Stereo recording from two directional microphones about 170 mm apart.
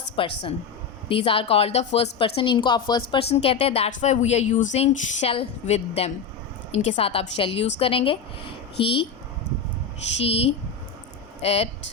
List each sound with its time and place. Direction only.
0.2 s a woman's voice: 30° left (ahead or behind)
10.2 s a woman's voice: 35° left (ahead or behind)